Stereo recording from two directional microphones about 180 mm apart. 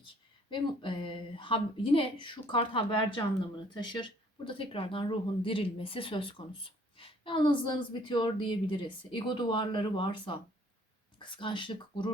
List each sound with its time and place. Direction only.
0.5 s speech: 30° left (ahead or behind)